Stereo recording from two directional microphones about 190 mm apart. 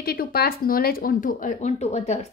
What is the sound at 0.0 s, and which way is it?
A woman's voice, 50° left (ahead or behind).